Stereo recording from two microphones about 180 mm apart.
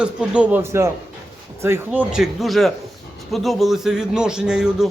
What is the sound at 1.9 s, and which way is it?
A man's voice, 5° right (ahead or behind).